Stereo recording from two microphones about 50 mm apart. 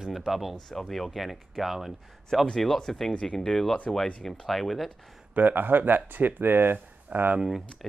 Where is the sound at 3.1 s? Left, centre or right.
Left.